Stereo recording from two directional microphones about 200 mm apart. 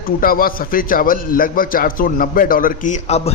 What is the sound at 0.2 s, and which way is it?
A man's voice, 45° left (ahead or behind).